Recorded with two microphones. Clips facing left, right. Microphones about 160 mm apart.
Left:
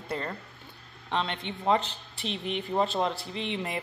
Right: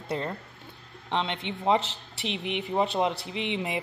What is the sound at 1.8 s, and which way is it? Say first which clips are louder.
Speech: right 2 dB; 85° right.